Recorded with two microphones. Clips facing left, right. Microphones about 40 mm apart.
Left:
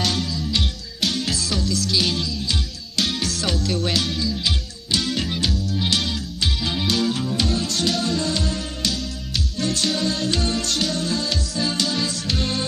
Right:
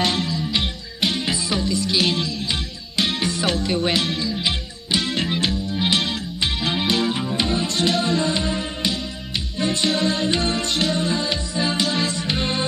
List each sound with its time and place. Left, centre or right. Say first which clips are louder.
0.0 s music: right 2 dB; right